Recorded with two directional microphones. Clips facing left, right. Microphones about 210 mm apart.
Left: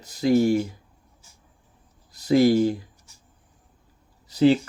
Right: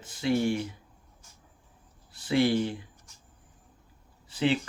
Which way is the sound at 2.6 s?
35° left (ahead or behind).